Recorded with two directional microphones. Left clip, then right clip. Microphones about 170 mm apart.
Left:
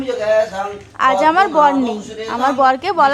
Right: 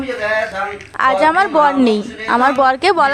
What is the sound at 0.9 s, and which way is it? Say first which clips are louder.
A woman's voice: even; 30° right (ahead or behind).